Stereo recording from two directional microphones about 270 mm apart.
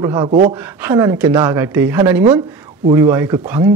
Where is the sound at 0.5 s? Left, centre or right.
Centre.